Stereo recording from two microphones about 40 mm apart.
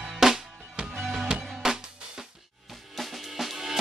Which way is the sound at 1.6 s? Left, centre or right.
Centre.